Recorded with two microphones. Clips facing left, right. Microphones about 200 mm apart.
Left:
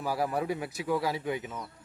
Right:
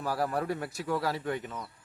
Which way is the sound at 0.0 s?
Centre (ahead or behind).